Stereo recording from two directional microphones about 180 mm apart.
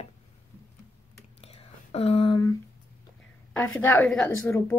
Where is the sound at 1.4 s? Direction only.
35° left (ahead or behind).